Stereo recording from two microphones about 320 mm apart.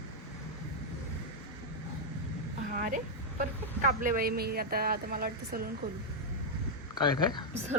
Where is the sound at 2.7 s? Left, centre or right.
Right.